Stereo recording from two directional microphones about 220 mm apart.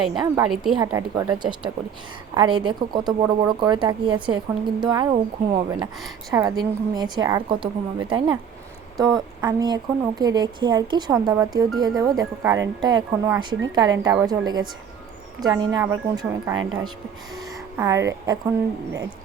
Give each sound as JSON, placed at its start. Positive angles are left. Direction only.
{"t": 0.1, "sound": "speech", "side_deg": -20}
{"t": 0.5, "sound": "a woman's voice", "side_deg": 0}
{"t": 0.9, "sound": "a woman's voice", "side_deg": -15}